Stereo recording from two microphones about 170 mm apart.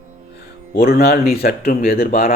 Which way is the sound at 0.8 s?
60° left (ahead or behind).